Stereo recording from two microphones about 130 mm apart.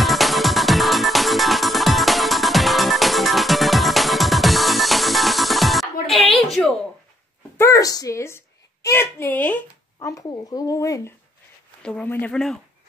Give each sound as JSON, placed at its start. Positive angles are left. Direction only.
{"t": 0.0, "sound": "music", "side_deg": 0}
{"t": 7.5, "sound": "a child's voice", "side_deg": 20}
{"t": 9.9, "sound": "speech", "side_deg": 25}
{"t": 11.8, "sound": "speech", "side_deg": 10}